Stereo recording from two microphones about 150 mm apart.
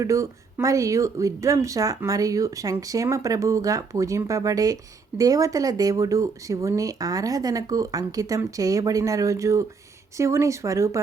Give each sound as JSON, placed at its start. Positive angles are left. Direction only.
{"t": 0.0, "sound": "speech", "side_deg": -20}